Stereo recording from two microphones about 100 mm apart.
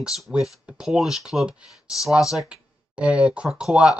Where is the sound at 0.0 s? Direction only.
5° right (ahead or behind).